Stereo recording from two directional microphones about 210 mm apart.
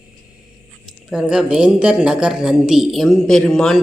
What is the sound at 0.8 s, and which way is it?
Speech, centre (ahead or behind).